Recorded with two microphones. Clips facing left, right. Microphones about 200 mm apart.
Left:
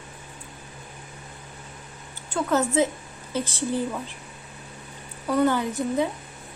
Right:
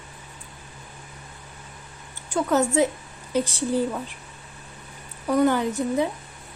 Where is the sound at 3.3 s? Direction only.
15° right (ahead or behind).